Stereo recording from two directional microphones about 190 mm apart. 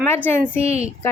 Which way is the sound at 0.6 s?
35° right (ahead or behind).